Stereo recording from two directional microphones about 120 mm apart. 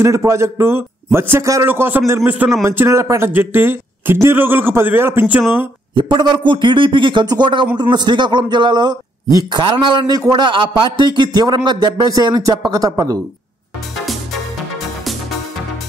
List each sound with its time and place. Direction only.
0.0 s a man's voice: 25° right (ahead or behind)
5.9 s a man's voice: 40° right (ahead or behind)